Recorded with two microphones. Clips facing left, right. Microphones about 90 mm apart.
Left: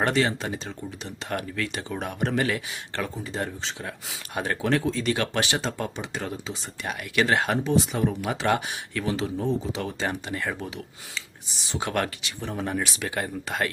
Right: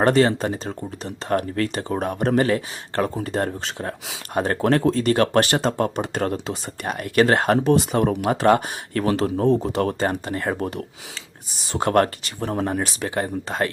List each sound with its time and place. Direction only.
0.0 s speech: 40° right (ahead or behind)
3.2 s speech: 55° right (ahead or behind)
8.3 s speech: 50° right (ahead or behind)
10.6 s speech: 50° right (ahead or behind); by 13.7 s 30° right (ahead or behind)